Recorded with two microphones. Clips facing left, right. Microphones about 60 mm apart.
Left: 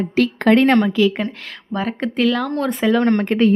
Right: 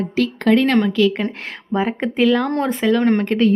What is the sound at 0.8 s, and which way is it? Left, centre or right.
Speech, centre.